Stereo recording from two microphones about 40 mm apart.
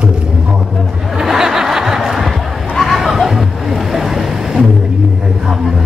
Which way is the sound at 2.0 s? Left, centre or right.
Centre.